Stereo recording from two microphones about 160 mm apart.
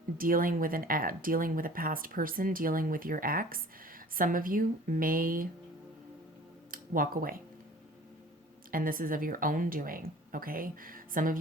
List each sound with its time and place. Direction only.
0.2 s speech: 60° right (ahead or behind)
6.7 s speech: 60° right (ahead or behind)
8.7 s speech: 60° right (ahead or behind)